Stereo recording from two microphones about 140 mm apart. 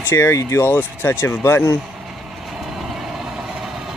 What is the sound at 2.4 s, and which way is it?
Vehicle, centre (ahead or behind).